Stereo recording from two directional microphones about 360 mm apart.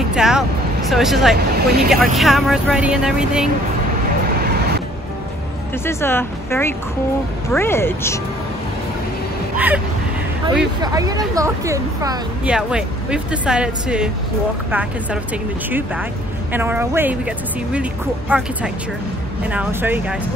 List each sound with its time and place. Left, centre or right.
0.1 s speech: centre
1.3 s speech: right
1.9 s speech: centre
4.4 s vehicle: right
5.9 s speech: centre
10.5 s speech: centre
16.5 s speech: centre
18.3 s speech: centre
19.5 s speech: centre